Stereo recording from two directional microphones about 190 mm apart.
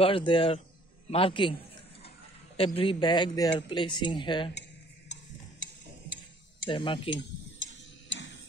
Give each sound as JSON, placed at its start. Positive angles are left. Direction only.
{"t": 0.0, "sound": "speech", "side_deg": 30}
{"t": 2.5, "sound": "speech", "side_deg": 30}
{"t": 5.1, "sound": "a sound", "side_deg": 75}
{"t": 6.7, "sound": "speech", "side_deg": 25}
{"t": 7.1, "sound": "tick-tock", "side_deg": 75}